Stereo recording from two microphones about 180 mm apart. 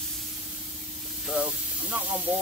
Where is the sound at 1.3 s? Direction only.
5° right (ahead or behind).